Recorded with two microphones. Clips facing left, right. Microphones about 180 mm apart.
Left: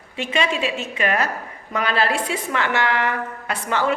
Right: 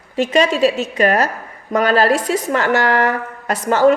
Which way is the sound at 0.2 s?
40° right (ahead or behind).